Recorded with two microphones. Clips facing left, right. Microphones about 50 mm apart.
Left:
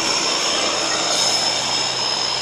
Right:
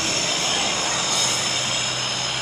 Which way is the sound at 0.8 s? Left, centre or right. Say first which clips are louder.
Left 3 dB; right.